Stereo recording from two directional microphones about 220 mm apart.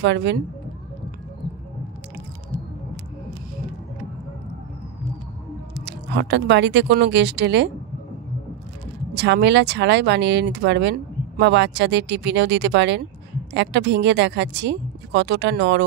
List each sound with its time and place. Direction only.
0.0 s speech: 55° right (ahead or behind)
5.8 s speech: 50° right (ahead or behind)
9.1 s speech: 50° right (ahead or behind)